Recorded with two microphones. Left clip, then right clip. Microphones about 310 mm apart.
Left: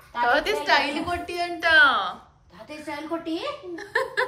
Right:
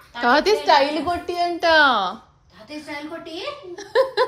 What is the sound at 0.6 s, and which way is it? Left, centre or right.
A woman's voice, centre.